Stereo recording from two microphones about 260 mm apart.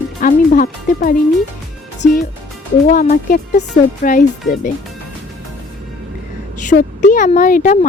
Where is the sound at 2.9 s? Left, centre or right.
Left.